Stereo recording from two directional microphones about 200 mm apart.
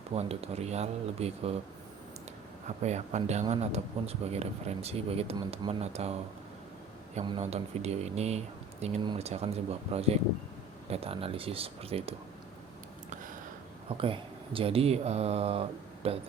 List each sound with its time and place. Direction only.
0.1 s a man's voice: 30° right (ahead or behind)
2.6 s a man's voice: 35° right (ahead or behind)
14.0 s speech: 25° right (ahead or behind)